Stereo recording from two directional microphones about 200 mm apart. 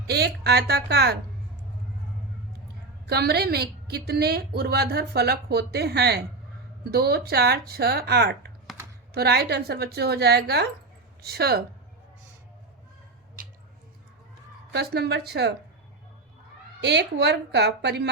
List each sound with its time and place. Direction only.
0.1 s speech: 55° right (ahead or behind)
3.1 s a woman's voice: 55° right (ahead or behind)
13.4 s squish: 45° right (ahead or behind)
14.7 s speech: 55° right (ahead or behind)
16.8 s speech: 60° right (ahead or behind)